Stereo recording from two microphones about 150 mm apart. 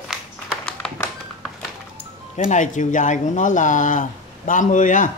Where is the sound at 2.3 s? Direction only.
55° left (ahead or behind).